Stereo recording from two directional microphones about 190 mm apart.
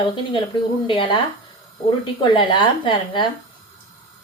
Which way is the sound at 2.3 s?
25° left (ahead or behind).